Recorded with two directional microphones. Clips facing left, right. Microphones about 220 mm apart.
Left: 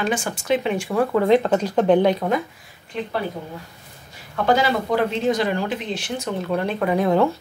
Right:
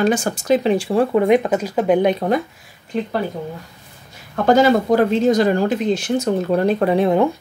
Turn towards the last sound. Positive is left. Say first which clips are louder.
# right 3 dB
turn(degrees=-20)  # may be behind; listen again after turning